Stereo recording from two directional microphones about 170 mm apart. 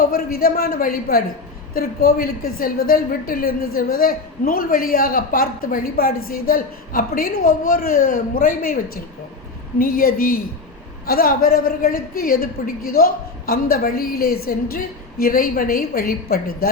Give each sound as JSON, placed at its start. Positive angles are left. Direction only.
{"t": 0.1, "sound": "a woman's voice", "side_deg": 65}